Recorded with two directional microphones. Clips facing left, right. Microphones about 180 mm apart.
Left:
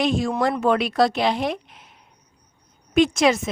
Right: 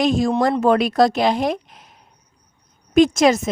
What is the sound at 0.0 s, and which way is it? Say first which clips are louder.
A woman's voice: right 4 dB; 40° right (ahead or behind).